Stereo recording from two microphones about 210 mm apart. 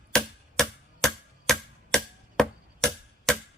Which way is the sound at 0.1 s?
Centre (ahead or behind).